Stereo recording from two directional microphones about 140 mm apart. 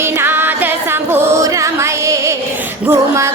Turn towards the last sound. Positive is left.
turn(degrees=-20)  # may be behind; listen again after turning